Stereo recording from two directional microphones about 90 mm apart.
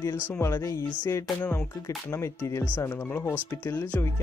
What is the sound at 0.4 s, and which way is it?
Speech, 30° left (ahead or behind).